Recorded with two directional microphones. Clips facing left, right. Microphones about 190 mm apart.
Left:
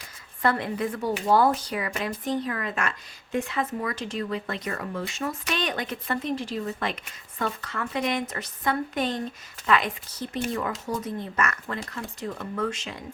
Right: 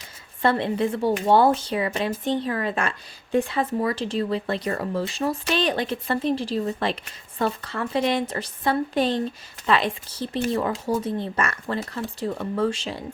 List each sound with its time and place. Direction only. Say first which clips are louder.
0.4 s speech: right 4 dB; 25° right (ahead or behind)